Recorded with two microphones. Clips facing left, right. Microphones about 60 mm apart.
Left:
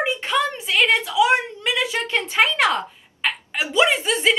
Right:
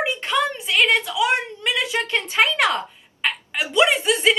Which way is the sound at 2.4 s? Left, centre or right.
Centre.